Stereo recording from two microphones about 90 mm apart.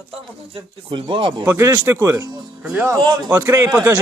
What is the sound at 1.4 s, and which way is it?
Speech, 30° right (ahead or behind).